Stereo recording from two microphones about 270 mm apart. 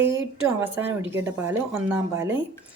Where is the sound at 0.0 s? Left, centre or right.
Right.